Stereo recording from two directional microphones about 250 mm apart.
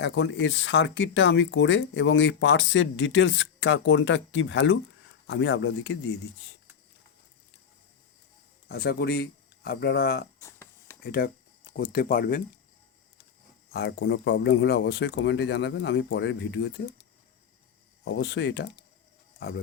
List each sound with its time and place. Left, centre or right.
0.0 s speech: left
8.7 s speech: left
10.4 s a sound: centre
11.0 s speech: left
13.7 s speech: left
18.0 s speech: left